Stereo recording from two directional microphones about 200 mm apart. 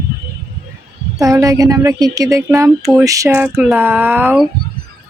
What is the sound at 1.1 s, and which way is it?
Speech, 15° right (ahead or behind).